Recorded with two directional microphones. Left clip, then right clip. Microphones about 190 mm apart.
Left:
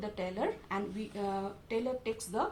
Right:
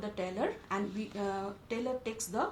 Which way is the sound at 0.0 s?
25° right (ahead or behind).